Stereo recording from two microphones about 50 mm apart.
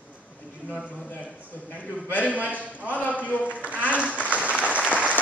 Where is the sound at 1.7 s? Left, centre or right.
Left.